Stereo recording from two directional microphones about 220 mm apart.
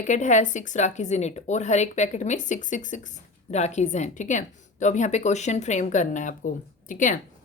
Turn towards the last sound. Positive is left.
turn(degrees=35)  # may be behind; listen again after turning